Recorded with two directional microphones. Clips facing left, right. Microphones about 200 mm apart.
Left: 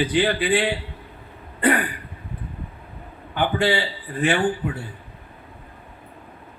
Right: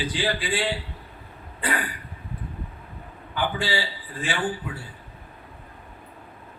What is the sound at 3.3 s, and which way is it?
A man's voice, 60° left (ahead or behind).